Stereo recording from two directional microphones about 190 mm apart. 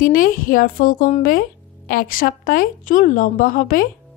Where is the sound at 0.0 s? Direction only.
45° left (ahead or behind).